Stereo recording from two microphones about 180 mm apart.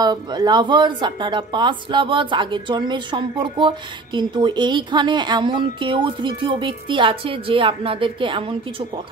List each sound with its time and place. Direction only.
0.0 s a woman's voice: 20° right (ahead or behind)